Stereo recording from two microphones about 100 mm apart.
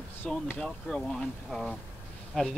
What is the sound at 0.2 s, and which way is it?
Speech, 10° left (ahead or behind).